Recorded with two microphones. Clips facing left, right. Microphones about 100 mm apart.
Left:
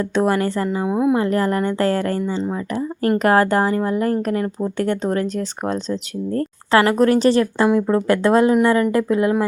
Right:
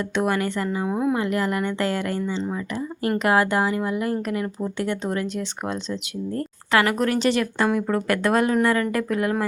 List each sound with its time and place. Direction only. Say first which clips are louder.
0.0 s speech: left 5 dB; 35° left (ahead or behind)
0.9 s speech: left 6 dB; 15° left (ahead or behind)
1.1 s speech: left 5 dB; 35° left (ahead or behind)
6.7 s speech: left 6 dB; 30° left (ahead or behind)
7.7 s speech: left 6 dB; 25° left (ahead or behind)